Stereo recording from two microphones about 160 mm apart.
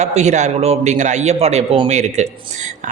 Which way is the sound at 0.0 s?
45° right (ahead or behind).